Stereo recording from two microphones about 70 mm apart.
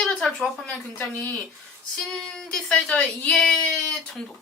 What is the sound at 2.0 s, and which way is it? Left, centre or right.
Speech, centre.